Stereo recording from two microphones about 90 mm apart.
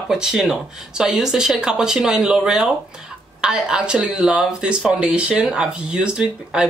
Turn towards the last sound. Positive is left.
turn(degrees=-10)  # may be behind; listen again after turning